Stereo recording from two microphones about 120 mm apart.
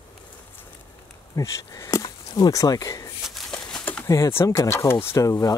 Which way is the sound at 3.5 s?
10° left (ahead or behind).